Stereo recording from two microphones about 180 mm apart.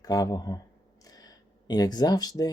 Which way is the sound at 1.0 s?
20° left (ahead or behind).